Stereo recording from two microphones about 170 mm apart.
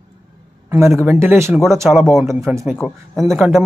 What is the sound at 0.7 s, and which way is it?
A man's voice, 15° right (ahead or behind).